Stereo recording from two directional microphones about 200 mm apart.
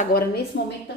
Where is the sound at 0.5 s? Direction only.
60° left (ahead or behind).